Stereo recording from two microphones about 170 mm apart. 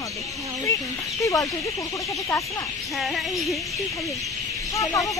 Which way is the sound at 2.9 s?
Centre (ahead or behind).